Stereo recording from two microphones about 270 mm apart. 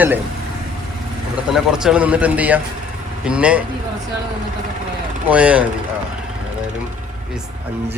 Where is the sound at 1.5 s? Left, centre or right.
Centre.